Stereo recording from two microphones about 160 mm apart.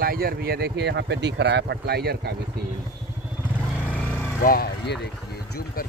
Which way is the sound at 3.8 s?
10° left (ahead or behind).